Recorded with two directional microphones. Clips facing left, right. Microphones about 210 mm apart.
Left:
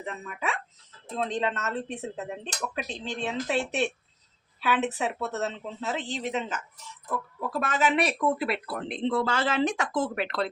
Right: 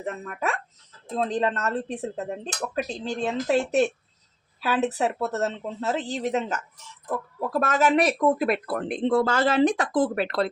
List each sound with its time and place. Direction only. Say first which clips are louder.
0.0 s speech: right 4 dB; 45° right (ahead or behind)